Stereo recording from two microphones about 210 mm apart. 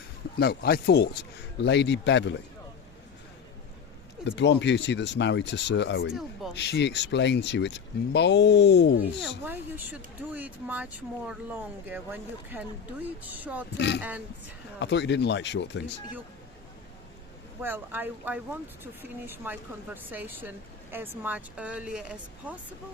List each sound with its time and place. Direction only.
0.3 s speech: 50° left (ahead or behind)
4.3 s speech: 55° left (ahead or behind)
9.4 s speech: 10° right (ahead or behind)
13.7 s speech: 55° left (ahead or behind)
17.6 s speech: 10° right (ahead or behind)